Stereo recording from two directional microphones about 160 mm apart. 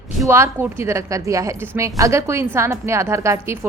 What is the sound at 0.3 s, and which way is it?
A woman's voice, 15° right (ahead or behind).